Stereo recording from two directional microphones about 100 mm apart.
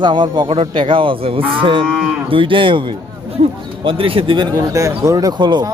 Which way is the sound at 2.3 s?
60° right (ahead or behind).